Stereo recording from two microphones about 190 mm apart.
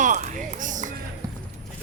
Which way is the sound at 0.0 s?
40° right (ahead or behind).